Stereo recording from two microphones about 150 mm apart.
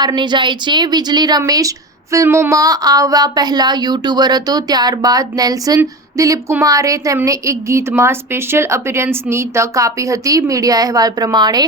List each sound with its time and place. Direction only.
0.0 s speech: 30° right (ahead or behind)